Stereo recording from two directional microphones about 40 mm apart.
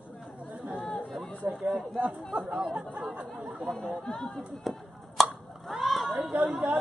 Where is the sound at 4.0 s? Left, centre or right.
Centre.